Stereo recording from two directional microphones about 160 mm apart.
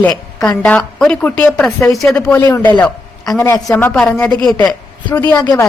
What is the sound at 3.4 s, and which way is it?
A woman's voice, 15° left (ahead or behind).